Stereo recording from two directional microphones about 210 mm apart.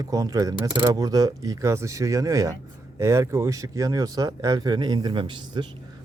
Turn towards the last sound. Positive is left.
turn(degrees=-20)  # may be behind; listen again after turning